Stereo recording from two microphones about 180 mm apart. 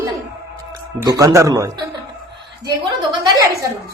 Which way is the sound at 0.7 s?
20° right (ahead or behind).